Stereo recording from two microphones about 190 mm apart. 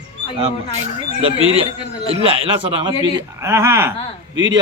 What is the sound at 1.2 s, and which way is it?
A man's voice, 30° right (ahead or behind).